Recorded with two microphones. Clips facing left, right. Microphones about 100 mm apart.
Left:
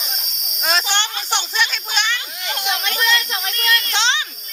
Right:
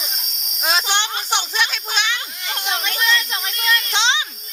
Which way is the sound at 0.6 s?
5° right (ahead or behind).